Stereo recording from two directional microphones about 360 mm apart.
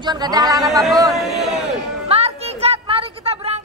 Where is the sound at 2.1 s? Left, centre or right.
Centre.